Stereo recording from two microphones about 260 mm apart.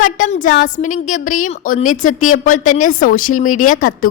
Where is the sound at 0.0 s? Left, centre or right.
Left.